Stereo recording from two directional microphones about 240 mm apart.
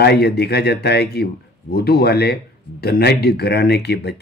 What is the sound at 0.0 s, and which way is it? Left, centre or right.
Speech, left.